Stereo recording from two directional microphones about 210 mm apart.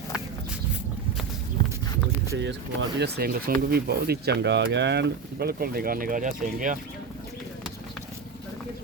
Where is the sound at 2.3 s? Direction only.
60° right (ahead or behind); by 6.8 s 40° right (ahead or behind).